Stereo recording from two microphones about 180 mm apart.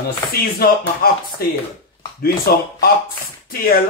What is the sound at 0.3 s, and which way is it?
Speech, 55° left (ahead or behind).